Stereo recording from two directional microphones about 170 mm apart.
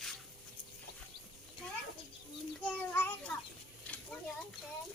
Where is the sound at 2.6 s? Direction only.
10° left (ahead or behind).